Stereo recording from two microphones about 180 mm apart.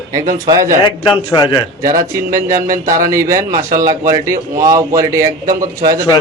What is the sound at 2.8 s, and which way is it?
A man's voice, 15° right (ahead or behind).